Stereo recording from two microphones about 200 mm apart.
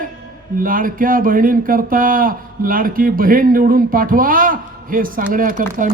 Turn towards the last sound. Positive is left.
turn(degrees=-40)  # may be behind; listen again after turning